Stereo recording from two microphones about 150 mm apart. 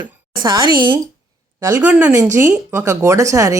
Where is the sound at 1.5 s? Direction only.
20° right (ahead or behind).